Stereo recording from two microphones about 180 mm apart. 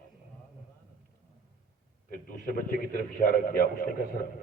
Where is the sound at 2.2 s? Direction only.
50° left (ahead or behind).